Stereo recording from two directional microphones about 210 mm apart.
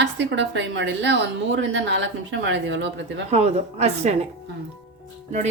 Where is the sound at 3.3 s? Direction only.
30° right (ahead or behind).